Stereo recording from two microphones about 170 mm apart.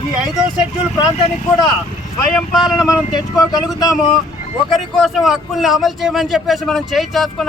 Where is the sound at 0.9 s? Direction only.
25° left (ahead or behind).